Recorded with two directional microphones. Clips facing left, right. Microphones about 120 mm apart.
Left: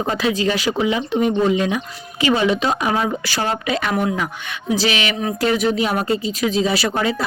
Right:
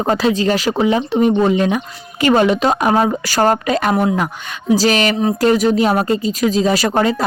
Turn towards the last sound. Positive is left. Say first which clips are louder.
# right 5 dB
turn(degrees=-45)  # may be behind; listen again after turning